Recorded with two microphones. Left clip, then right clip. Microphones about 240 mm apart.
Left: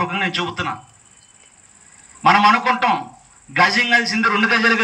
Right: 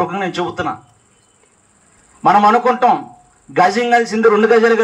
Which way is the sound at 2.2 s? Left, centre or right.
Right.